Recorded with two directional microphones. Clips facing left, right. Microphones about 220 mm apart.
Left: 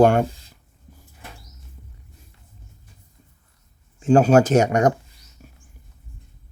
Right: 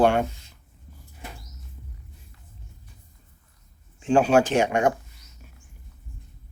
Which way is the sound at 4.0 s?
40° left (ahead or behind).